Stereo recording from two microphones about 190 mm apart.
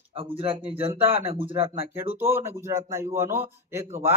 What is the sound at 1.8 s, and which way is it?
A man's voice, 10° right (ahead or behind).